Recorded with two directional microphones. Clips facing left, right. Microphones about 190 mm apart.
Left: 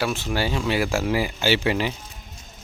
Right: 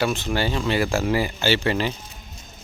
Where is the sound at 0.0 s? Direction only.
5° left (ahead or behind).